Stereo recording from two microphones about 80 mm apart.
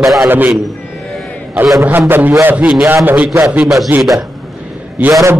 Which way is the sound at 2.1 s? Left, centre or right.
Right.